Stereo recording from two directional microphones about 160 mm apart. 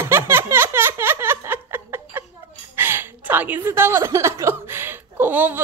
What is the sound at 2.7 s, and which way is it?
A woman's voice, 15° right (ahead or behind).